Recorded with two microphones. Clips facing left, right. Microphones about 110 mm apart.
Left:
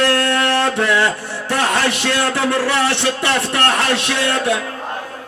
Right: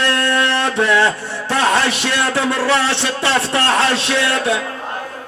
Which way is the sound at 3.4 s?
60° left (ahead or behind).